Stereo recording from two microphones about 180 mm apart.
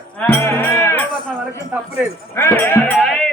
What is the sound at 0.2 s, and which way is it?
Music, 10° left (ahead or behind).